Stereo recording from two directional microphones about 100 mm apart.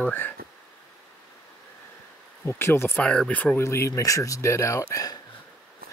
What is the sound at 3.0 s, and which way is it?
Speech, 10° left (ahead or behind).